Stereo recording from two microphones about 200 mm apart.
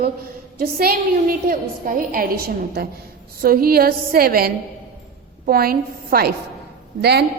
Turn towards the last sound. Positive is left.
turn(degrees=-55)  # may be behind; listen again after turning